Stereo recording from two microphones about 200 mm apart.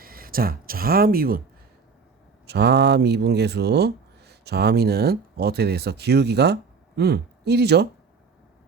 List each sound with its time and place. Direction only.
0.0 s speech: 45° right (ahead or behind)
2.5 s speech: 55° right (ahead or behind)